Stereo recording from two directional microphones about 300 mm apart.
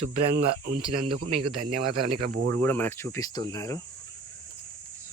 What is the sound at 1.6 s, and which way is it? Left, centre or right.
Speech, right.